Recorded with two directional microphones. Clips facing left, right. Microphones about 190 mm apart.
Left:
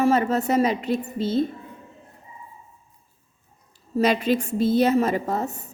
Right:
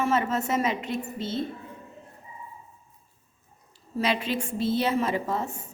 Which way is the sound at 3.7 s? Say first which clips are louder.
Left 6 dB; 45° left (ahead or behind).